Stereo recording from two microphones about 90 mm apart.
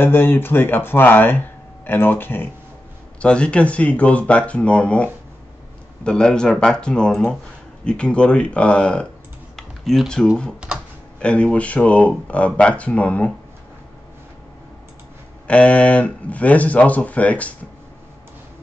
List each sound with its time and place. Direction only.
0.0 s speech: 25° left (ahead or behind)
3.2 s speech: 10° left (ahead or behind)
9.6 s typing: 5° left (ahead or behind)
11.1 s speech: 15° left (ahead or behind)
15.4 s speech: 15° left (ahead or behind)